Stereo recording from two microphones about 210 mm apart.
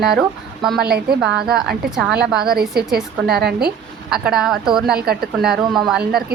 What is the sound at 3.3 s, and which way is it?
Speech, 50° right (ahead or behind).